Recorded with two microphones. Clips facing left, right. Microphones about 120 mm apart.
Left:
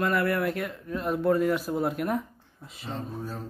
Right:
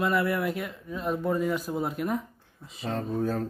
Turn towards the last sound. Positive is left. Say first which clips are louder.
# right 7 dB
turn(degrees=-65)  # may be behind; listen again after turning